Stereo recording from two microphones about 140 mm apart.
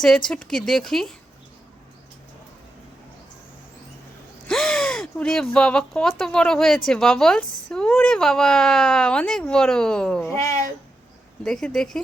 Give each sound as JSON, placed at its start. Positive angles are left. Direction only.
{"t": 0.3, "sound": "a woman's voice", "side_deg": 5}
{"t": 4.4, "sound": "gasp", "side_deg": 0}
{"t": 5.5, "sound": "a woman's voice", "side_deg": 5}
{"t": 10.2, "sound": "speech", "side_deg": 20}
{"t": 11.4, "sound": "a woman's voice", "side_deg": 5}